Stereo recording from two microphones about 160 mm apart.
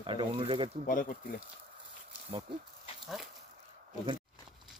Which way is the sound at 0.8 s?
55° left (ahead or behind).